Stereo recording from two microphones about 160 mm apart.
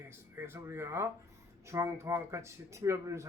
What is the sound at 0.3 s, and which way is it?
Speech, 15° right (ahead or behind).